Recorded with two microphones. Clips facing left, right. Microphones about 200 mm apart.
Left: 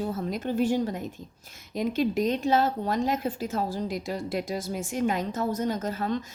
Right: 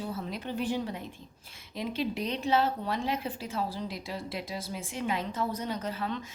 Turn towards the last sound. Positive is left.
turn(degrees=40)  # may be behind; listen again after turning